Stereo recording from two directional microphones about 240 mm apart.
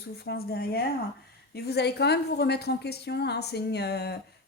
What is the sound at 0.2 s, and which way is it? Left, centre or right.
A woman's voice, left.